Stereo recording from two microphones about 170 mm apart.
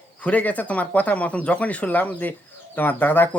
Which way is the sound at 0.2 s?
10° left (ahead or behind).